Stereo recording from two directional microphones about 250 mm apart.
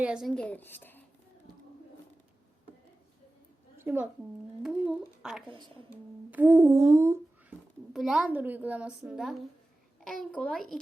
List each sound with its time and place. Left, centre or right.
0.0 s a woman's voice: centre
3.8 s a woman's voice: centre
6.3 s humming: centre
7.9 s a woman's voice: centre